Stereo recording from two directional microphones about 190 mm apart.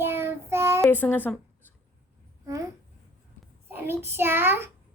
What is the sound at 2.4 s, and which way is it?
Babbling, 15° right (ahead or behind).